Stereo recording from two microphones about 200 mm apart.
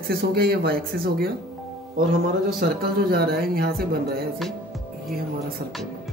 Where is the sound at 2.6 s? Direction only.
50° right (ahead or behind).